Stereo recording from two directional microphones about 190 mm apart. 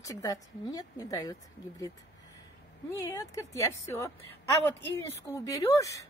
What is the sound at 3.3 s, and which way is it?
A woman's voice, 15° left (ahead or behind).